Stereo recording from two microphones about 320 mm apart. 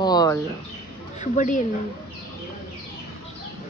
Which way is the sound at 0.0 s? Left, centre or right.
Centre.